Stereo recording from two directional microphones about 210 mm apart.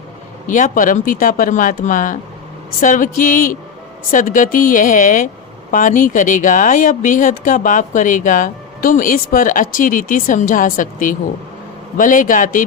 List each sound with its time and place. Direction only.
0.4 s speech: 40° left (ahead or behind)